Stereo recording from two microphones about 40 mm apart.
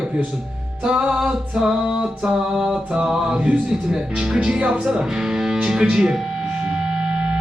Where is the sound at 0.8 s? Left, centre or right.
Right.